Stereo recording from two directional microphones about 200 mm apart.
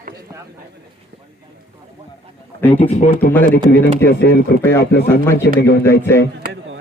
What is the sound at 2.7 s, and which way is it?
Speech, 35° left (ahead or behind).